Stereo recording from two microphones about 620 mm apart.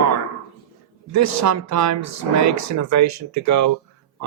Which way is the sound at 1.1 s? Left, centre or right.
Right.